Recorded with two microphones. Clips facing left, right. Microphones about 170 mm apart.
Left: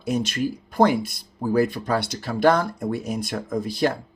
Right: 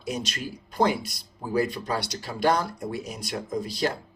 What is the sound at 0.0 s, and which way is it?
Speech, 55° left (ahead or behind).